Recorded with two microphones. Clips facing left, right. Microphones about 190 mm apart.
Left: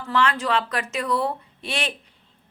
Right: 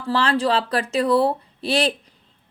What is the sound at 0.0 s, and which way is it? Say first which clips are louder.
Speech: right 3 dB; 30° right (ahead or behind).